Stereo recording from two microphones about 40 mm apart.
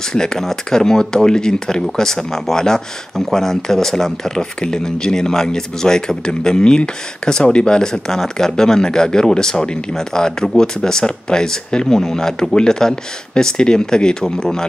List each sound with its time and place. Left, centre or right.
0.1 s speech: centre